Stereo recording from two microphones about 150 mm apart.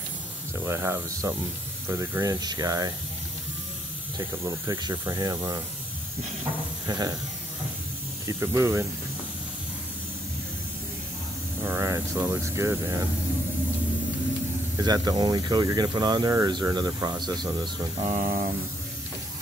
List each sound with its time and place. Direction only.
0.7 s speech: 15° right (ahead or behind)
4.5 s speech: 25° right (ahead or behind)
6.9 s speech: 25° right (ahead or behind)
8.3 s speech: 20° right (ahead or behind)
11.6 s speech: 20° right (ahead or behind)
14.8 s speech: 25° right (ahead or behind)
18.0 s a sound: 55° right (ahead or behind)